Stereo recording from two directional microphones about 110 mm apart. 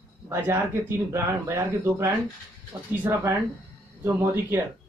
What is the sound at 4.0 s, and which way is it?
Speech, 20° right (ahead or behind).